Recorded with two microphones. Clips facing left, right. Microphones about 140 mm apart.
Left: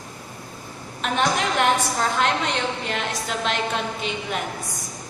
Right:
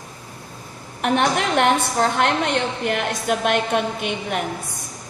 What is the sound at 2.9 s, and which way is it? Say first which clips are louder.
A woman's voice: right 6 dB; 55° right (ahead or behind).